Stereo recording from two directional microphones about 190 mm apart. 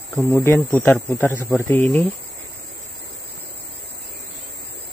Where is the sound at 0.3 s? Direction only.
15° left (ahead or behind).